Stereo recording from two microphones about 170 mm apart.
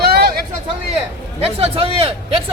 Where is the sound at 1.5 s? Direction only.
35° right (ahead or behind).